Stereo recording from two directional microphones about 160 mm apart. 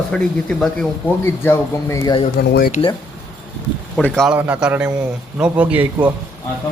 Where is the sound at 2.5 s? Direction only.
70° left (ahead or behind).